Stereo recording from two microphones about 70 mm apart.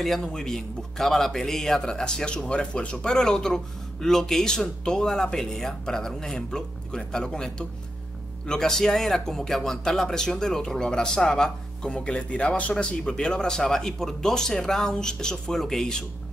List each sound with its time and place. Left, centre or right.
0.0 s a man's voice: centre